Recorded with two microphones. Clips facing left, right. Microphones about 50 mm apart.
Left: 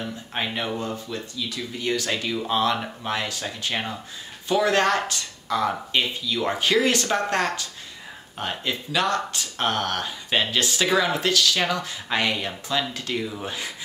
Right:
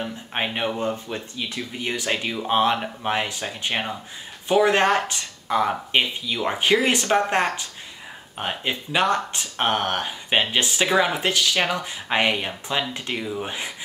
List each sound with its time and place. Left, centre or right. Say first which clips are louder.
0.0 s speech: right 2 dB; right
1.8 s speech: even; right